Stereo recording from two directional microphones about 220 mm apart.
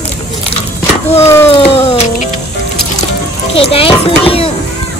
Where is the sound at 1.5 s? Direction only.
25° left (ahead or behind).